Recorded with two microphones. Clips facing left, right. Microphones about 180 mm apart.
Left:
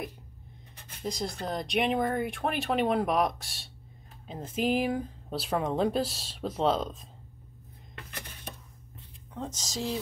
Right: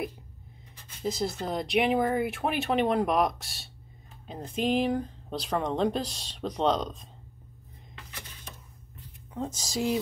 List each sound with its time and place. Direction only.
1.0 s speech: 5° right (ahead or behind)
7.9 s dishes: 60° left (ahead or behind)
9.3 s speech: 10° right (ahead or behind)